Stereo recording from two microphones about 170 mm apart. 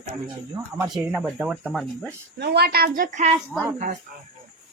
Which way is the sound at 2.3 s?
75° right (ahead or behind).